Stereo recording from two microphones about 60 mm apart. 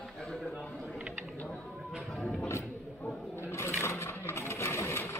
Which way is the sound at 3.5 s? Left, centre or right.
Left.